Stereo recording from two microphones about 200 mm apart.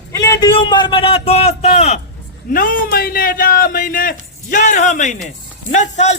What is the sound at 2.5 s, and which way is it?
A man's voice, 45° left (ahead or behind).